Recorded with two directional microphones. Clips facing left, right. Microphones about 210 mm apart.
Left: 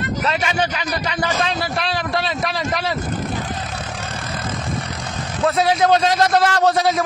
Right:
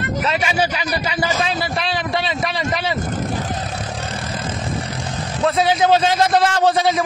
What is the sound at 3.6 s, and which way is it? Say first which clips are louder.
Vehicle: right 2 dB; 30° right (ahead or behind).